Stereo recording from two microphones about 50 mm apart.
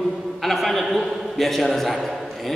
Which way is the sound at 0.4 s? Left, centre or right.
Centre.